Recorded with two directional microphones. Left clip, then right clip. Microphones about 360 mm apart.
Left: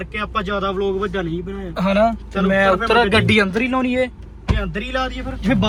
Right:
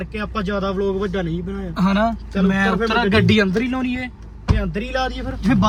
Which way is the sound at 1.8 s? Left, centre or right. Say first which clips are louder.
Left 3 dB; centre.